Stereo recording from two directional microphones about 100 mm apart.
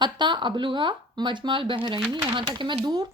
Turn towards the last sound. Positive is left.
turn(degrees=-50)  # may be behind; listen again after turning